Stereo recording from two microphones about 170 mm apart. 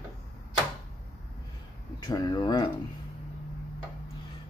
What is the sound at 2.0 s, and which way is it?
Speech, 25° left (ahead or behind).